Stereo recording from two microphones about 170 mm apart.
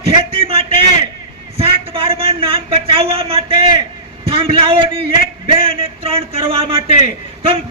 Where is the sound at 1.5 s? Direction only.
30° right (ahead or behind).